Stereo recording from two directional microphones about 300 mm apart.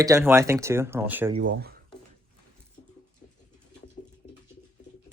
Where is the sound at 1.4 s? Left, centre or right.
Right.